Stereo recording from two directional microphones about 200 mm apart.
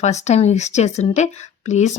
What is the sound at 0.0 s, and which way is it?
Speech, 35° left (ahead or behind).